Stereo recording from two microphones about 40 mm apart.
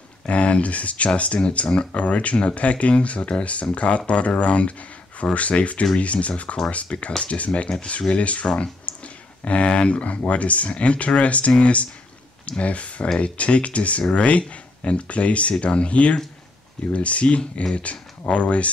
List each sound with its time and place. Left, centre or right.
0.3 s speech: left
8.9 s a sound: left
9.4 s speech: left